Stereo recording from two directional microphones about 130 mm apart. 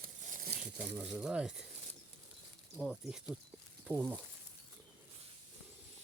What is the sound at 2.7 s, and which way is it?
Speech, centre (ahead or behind).